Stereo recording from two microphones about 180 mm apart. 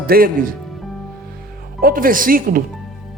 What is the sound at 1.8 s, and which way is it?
Speech, 55° right (ahead or behind).